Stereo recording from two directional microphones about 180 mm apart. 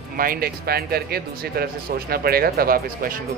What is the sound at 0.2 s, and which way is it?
A man's voice, 55° right (ahead or behind).